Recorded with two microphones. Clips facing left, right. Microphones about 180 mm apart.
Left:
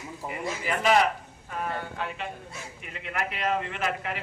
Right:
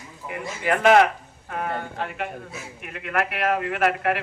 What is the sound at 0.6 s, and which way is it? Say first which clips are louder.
A man's voice: right 6 dB; 60° right (ahead or behind).